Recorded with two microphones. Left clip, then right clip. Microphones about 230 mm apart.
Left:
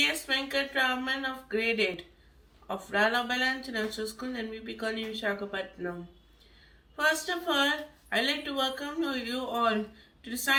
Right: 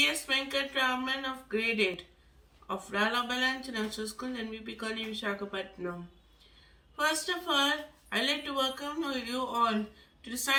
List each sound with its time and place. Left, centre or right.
0.0 s speech: centre
7.0 s speech: centre